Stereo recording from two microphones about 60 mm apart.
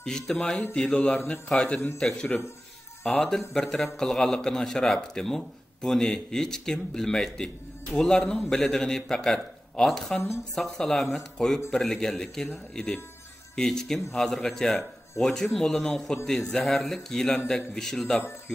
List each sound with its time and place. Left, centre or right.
0.0 s a man's voice: centre
3.0 s speech: left
3.3 s a man's voice: centre